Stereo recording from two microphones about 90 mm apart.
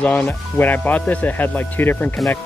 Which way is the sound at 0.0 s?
15° left (ahead or behind).